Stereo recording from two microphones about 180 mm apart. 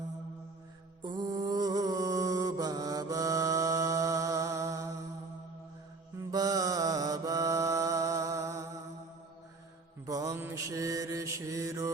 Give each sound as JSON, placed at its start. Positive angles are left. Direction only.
{"t": 1.0, "sound": "mantra", "side_deg": -25}
{"t": 6.1, "sound": "mantra", "side_deg": -20}
{"t": 10.1, "sound": "mantra", "side_deg": -20}